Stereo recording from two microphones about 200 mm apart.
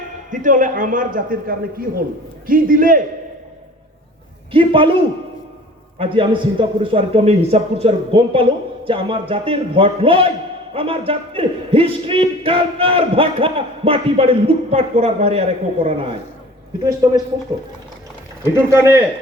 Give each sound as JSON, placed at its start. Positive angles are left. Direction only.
{"t": 0.3, "sound": "a man's voice", "side_deg": -40}
{"t": 4.5, "sound": "speech", "side_deg": -25}
{"t": 18.5, "sound": "speech", "side_deg": -15}